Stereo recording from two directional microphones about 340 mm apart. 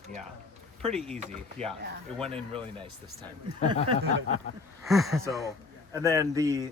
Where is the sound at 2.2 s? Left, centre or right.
Centre.